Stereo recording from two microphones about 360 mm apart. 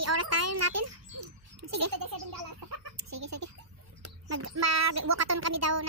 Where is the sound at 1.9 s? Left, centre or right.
Right.